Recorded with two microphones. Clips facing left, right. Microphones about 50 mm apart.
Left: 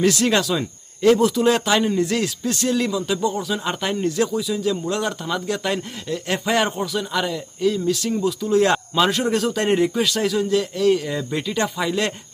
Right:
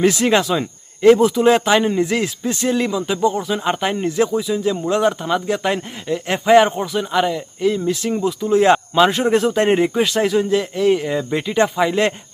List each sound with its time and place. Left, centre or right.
0.0 s speech: right